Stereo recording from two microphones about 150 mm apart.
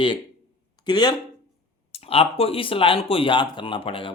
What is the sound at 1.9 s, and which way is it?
Speech, 40° left (ahead or behind).